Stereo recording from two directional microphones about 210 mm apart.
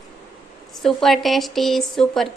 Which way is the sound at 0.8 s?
Centre (ahead or behind).